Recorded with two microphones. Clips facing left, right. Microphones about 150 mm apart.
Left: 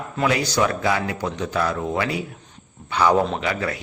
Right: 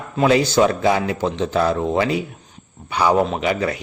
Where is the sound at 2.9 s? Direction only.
10° right (ahead or behind).